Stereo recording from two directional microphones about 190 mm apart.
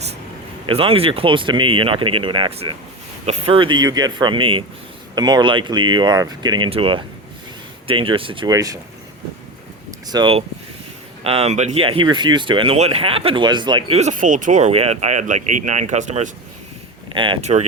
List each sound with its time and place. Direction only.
0.7 s speech: 30° right (ahead or behind)
10.1 s speech: 25° right (ahead or behind)
17.1 s speech: 25° right (ahead or behind)